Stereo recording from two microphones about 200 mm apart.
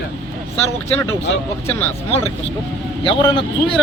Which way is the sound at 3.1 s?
25° left (ahead or behind).